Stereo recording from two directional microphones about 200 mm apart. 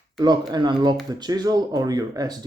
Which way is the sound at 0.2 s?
20° right (ahead or behind).